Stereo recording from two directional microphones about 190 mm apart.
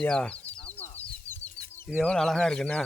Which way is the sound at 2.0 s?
5° left (ahead or behind).